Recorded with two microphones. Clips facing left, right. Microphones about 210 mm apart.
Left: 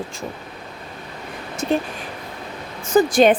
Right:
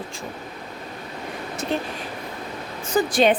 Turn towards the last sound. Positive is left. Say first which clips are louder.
# left 5 dB
turn(degrees=45)  # may be behind; listen again after turning